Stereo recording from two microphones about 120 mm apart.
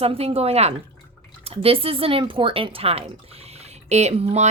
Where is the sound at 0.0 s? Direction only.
55° right (ahead or behind).